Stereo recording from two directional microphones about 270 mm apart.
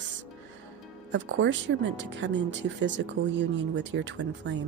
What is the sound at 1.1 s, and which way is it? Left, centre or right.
Speech, right.